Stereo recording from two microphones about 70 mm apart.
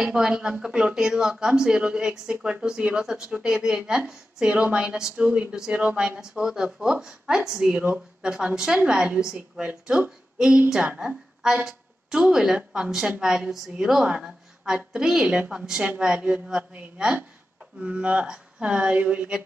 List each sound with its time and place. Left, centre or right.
0.0 s speech: centre
5.2 s speech: right
9.7 s a woman's voice: right